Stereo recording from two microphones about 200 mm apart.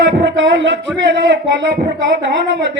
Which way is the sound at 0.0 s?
65° right (ahead or behind).